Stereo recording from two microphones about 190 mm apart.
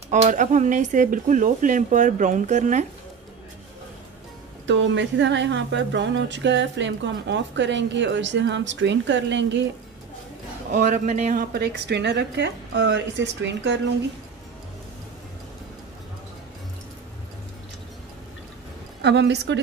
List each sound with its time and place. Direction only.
0.1 s speech: 40° right (ahead or behind)
4.6 s a woman's voice: 70° right (ahead or behind)
10.7 s speech: 40° right (ahead or behind)
11.5 s a woman's voice: 60° right (ahead or behind)
18.9 s a woman's voice: 65° right (ahead or behind)